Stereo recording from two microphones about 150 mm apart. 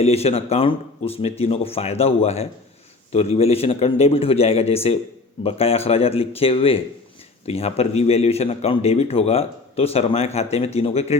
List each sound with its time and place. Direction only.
0.0 s a man's voice: 45° left (ahead or behind)